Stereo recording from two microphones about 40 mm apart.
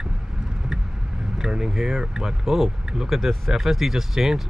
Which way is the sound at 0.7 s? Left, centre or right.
Centre.